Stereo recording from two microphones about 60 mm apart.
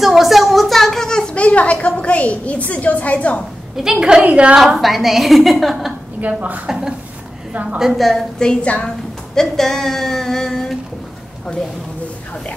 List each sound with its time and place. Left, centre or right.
0.0 s a sound: centre; by 3.4 s left
3.7 s a woman's voice: centre
4.2 s a woman's voice: right
4.6 s a woman's voice: centre
6.2 s a woman's voice: right
7.8 s a woman's voice: centre
8.4 s a woman's voice: centre